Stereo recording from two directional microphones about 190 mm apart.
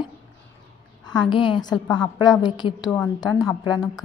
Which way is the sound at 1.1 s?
25° left (ahead or behind).